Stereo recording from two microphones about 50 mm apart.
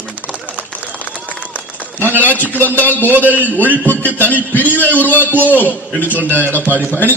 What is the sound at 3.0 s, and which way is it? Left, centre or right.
Speech, right.